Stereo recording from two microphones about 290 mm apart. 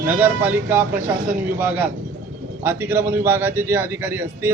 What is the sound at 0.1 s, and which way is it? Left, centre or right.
A man's voice, centre.